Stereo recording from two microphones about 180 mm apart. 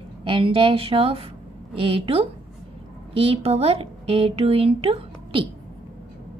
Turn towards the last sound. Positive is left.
turn(degrees=-30)  # may be behind; listen again after turning